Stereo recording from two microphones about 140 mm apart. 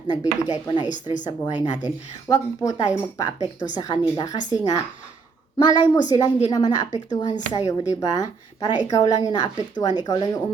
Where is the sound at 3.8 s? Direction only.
25° left (ahead or behind).